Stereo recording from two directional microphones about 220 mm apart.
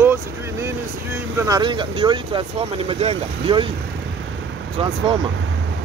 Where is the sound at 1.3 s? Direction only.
15° right (ahead or behind).